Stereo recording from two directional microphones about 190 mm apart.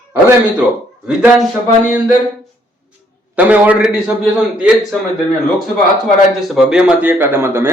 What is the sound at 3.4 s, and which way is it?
Speech, 10° right (ahead or behind).